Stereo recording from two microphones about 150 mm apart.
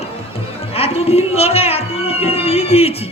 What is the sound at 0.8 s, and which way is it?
Music, 40° left (ahead or behind).